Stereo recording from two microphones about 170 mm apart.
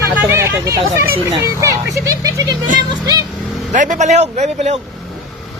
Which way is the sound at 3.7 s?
45° right (ahead or behind).